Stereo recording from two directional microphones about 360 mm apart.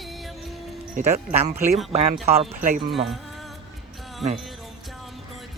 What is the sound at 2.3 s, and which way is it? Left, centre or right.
Speech, centre.